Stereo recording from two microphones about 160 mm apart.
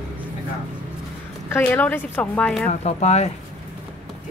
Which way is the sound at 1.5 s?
10° left (ahead or behind).